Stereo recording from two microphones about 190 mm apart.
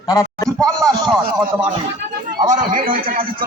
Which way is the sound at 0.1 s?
20° left (ahead or behind).